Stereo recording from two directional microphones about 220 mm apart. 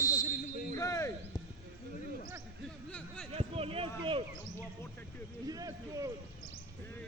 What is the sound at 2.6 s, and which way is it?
Speech, 5° left (ahead or behind).